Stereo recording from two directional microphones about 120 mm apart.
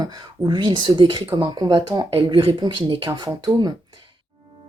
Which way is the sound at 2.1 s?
50° right (ahead or behind).